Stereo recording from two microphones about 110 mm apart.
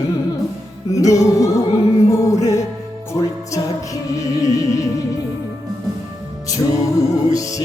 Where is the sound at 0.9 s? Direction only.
30° left (ahead or behind).